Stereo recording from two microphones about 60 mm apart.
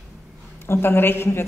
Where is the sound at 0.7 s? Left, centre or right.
Left.